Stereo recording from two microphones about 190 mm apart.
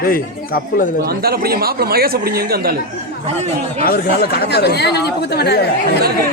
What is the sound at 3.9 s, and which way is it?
Speech, 50° left (ahead or behind).